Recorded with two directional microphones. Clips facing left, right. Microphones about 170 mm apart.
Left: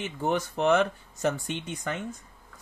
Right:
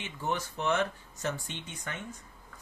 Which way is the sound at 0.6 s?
90° left.